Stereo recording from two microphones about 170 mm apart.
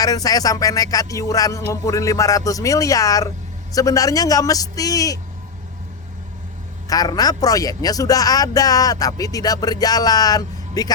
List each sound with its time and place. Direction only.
0.0 s music: 20° left (ahead or behind)
6.8 s music: 20° left (ahead or behind)